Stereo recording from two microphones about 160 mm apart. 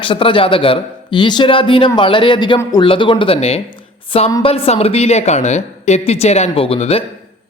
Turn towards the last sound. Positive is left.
turn(degrees=35)  # may be behind; listen again after turning